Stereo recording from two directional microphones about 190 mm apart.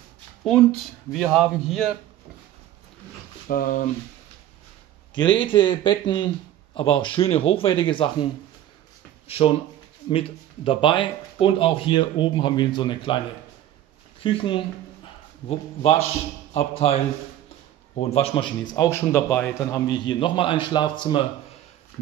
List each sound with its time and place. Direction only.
1.1 s speech: centre (ahead or behind)
3.4 s speech: 45° left (ahead or behind)
5.1 s speech: 25° left (ahead or behind)
10.0 s speech: 30° left (ahead or behind)
14.2 s a man's voice: 25° left (ahead or behind)
17.9 s speech: 35° left (ahead or behind); by 19.8 s 10° left (ahead or behind)
19.9 s speech: 25° left (ahead or behind)